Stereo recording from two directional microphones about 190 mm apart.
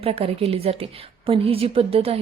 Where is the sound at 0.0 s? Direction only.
30° right (ahead or behind).